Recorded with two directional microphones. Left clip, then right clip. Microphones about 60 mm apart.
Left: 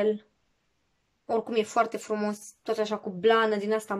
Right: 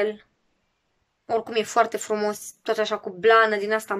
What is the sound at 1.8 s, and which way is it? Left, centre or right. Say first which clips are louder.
Speech: right 8 dB; left.